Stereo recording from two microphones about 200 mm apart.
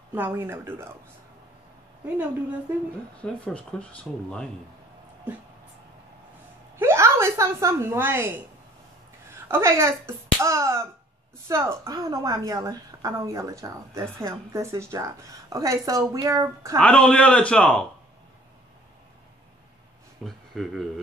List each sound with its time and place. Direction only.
0.1 s a woman's voice: 10° right (ahead or behind)
3.2 s speech: 5° left (ahead or behind)
6.8 s a woman's voice: 15° right (ahead or behind)
9.3 s a woman's voice: 15° right (ahead or behind)
16.7 s speech: 5° left (ahead or behind)
20.2 s speech: centre (ahead or behind)